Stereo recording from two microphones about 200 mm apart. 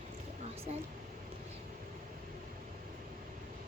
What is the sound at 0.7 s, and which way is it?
Speech, 35° right (ahead or behind).